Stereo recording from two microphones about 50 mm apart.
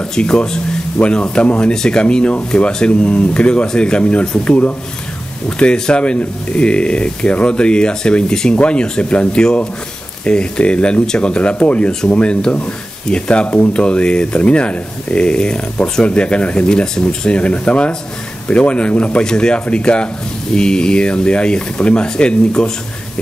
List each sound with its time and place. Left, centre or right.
0.0 s speech: centre